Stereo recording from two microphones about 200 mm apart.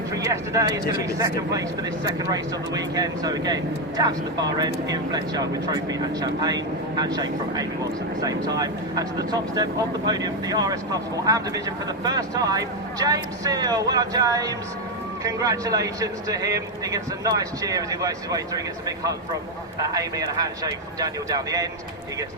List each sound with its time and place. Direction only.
0.1 s speech: 15° right (ahead or behind)